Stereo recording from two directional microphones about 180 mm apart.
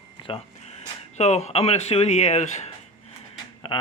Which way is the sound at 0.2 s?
30° left (ahead or behind).